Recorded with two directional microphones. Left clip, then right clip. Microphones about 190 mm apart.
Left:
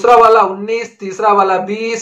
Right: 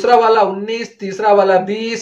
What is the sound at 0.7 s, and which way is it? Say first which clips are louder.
Speech: left 3 dB; 10° right (ahead or behind).